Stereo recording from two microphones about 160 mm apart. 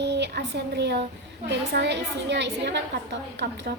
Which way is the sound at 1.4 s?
90° right.